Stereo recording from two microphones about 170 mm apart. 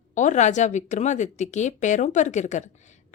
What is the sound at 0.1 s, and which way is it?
Speech, 45° left (ahead or behind).